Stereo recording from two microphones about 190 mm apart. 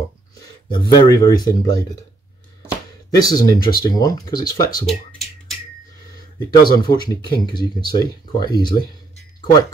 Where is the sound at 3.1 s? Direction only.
20° left (ahead or behind).